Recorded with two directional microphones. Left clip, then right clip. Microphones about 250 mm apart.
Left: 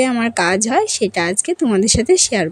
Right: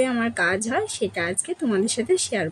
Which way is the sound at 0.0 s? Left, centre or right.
Left.